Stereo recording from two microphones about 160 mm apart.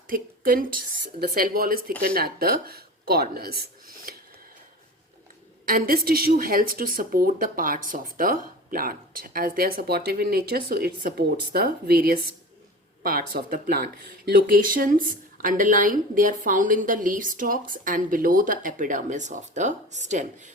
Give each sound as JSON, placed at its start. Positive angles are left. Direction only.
{"t": 0.1, "sound": "a woman's voice", "side_deg": -65}
{"t": 5.6, "sound": "a woman's voice", "side_deg": -65}
{"t": 13.0, "sound": "a woman's voice", "side_deg": -65}